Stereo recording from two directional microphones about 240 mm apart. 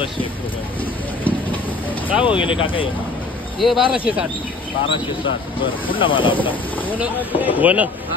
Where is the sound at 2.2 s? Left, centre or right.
Left.